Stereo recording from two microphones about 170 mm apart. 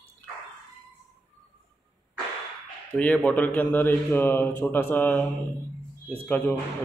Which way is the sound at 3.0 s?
10° left (ahead or behind).